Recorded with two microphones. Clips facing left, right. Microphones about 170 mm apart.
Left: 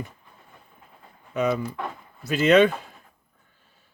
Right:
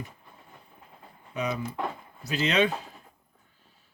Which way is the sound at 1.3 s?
50° left (ahead or behind).